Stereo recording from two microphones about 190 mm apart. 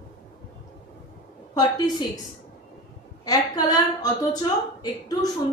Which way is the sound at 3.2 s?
20° left (ahead or behind).